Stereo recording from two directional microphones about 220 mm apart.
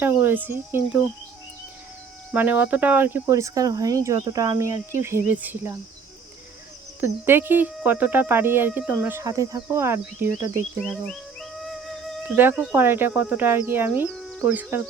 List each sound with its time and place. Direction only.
0.0 s speech: 10° right (ahead or behind)
2.3 s speech: 10° right (ahead or behind)
7.3 s speech: 10° right (ahead or behind)
10.8 s music: centre (ahead or behind)
12.7 s speech: 10° right (ahead or behind)